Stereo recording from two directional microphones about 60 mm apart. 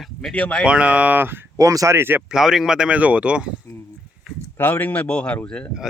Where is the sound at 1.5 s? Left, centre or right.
Right.